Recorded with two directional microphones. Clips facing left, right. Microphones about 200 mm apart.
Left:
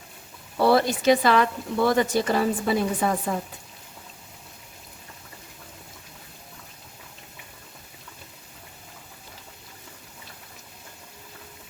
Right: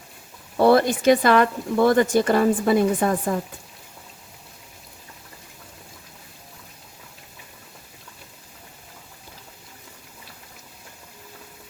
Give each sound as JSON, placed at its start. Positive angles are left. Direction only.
{"t": 0.6, "sound": "speech", "side_deg": -50}